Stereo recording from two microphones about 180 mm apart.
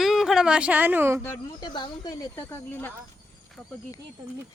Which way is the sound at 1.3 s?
20° left (ahead or behind).